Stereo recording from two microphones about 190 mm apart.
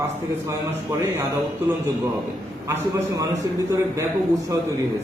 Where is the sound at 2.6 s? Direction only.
15° right (ahead or behind).